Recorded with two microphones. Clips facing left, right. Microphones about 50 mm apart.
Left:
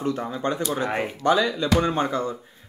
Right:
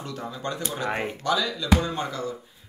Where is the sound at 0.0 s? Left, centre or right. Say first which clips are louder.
Left 7 dB; left.